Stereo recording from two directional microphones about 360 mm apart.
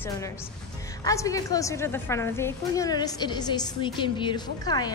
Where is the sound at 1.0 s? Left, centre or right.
Centre.